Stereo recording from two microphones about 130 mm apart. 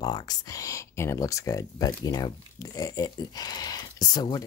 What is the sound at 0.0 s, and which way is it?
Speech, 30° left (ahead or behind).